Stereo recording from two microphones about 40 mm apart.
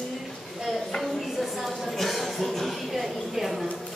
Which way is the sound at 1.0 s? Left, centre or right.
Centre.